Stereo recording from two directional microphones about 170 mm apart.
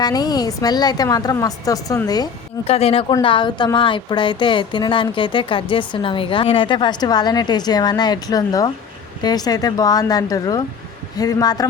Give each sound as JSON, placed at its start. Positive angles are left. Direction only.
{"t": 0.0, "sound": "a woman's voice", "side_deg": 25}
{"t": 2.6, "sound": "a woman's voice", "side_deg": 35}